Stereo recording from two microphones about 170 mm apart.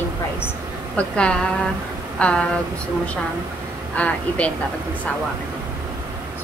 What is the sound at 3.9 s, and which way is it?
Speech, 10° left (ahead or behind).